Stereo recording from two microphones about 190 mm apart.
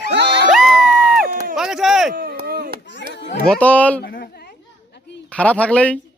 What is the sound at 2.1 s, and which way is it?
Chop, 55° right (ahead or behind).